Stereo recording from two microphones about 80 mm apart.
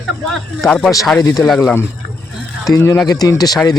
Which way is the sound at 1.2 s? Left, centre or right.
Left.